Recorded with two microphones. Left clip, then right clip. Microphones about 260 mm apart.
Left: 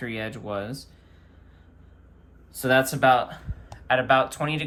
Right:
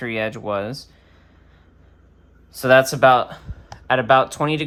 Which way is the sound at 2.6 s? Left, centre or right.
Right.